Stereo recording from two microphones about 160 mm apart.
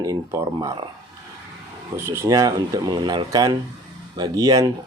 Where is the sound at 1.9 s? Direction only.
15° right (ahead or behind).